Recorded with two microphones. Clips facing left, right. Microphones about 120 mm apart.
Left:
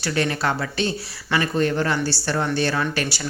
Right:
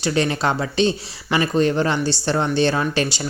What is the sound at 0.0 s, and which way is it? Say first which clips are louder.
Speech: right 3 dB; 20° right (ahead or behind).